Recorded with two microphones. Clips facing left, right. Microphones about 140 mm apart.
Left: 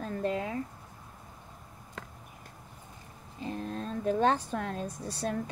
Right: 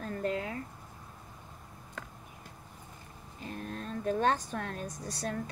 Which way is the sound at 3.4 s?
25° left (ahead or behind).